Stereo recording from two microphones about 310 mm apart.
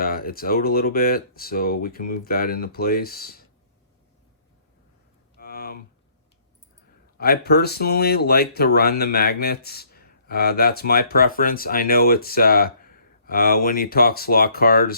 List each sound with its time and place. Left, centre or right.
0.0 s speech: left
5.4 s a sound: left
7.2 s speech: left